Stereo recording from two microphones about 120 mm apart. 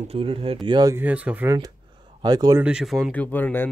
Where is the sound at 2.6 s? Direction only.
5° right (ahead or behind).